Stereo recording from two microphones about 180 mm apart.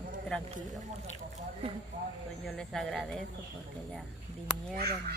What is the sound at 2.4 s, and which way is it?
Speech, 5° left (ahead or behind).